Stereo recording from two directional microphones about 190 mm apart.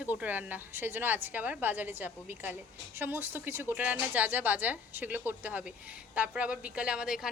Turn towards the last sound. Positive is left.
turn(degrees=0)  # may be behind; listen again after turning